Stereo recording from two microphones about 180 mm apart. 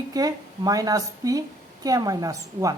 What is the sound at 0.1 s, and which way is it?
A woman's voice, 20° right (ahead or behind).